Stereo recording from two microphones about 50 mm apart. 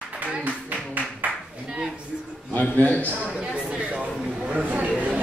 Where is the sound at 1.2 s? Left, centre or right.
Right.